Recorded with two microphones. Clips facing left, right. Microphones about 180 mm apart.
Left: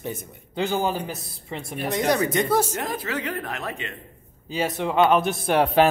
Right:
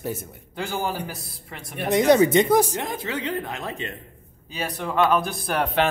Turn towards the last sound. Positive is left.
turn(degrees=25)  # may be behind; listen again after turning